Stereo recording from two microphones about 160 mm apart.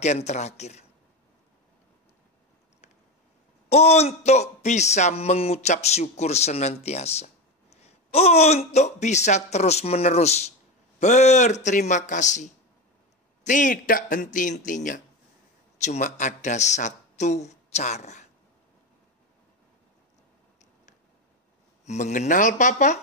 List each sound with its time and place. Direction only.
0.0 s a man's voice: 45° left (ahead or behind)
3.7 s a man's voice: 40° left (ahead or behind)
21.8 s a man's voice: 45° left (ahead or behind)